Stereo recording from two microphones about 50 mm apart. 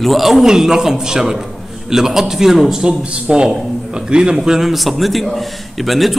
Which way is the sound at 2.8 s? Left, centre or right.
Centre.